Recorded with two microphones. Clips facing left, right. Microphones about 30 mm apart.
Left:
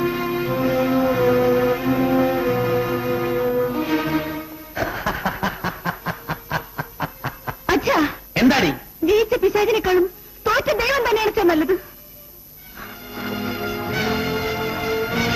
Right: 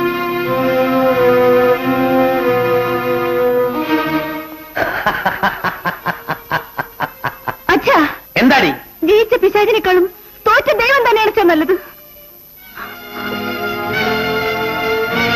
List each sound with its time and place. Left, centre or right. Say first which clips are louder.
0.0 s music: right 5 dB; right